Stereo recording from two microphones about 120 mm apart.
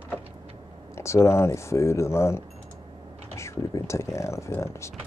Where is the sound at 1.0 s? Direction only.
25° left (ahead or behind).